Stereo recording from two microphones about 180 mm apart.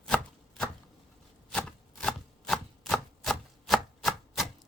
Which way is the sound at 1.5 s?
5° left (ahead or behind).